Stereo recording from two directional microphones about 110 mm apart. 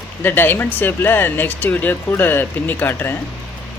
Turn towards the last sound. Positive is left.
turn(degrees=20)  # may be behind; listen again after turning